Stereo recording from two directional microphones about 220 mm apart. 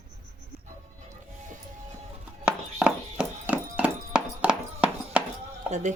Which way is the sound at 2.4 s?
5° right (ahead or behind).